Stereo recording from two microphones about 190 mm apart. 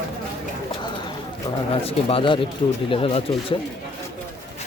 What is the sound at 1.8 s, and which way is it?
Speech, 30° left (ahead or behind).